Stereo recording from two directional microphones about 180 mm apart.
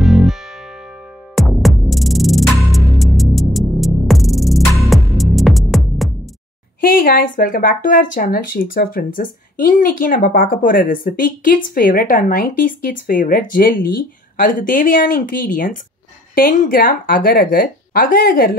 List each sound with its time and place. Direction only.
0.0 s music: centre (ahead or behind)
6.8 s speech: 55° left (ahead or behind)